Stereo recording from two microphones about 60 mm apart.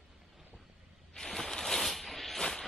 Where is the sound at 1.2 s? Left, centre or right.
Centre.